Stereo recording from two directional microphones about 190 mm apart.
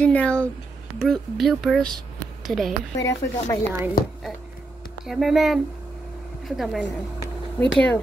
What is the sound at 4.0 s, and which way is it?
Speech, 50° left (ahead or behind).